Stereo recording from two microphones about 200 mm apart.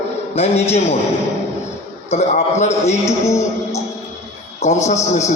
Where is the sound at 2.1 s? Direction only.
35° left (ahead or behind).